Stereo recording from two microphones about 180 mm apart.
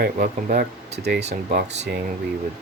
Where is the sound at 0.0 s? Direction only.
60° right (ahead or behind).